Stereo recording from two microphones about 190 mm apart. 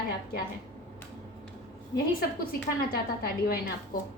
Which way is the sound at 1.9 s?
50° left (ahead or behind).